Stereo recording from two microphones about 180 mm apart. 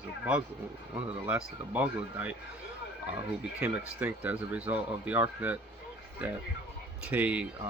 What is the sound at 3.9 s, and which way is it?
Speech, 10° right (ahead or behind).